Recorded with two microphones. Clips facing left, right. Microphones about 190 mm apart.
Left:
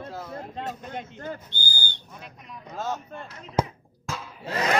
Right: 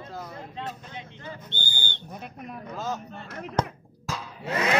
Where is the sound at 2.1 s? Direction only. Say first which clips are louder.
Right 7 dB; 55° right (ahead or behind).